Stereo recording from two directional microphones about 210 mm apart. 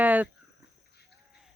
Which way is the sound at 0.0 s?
10° right (ahead or behind).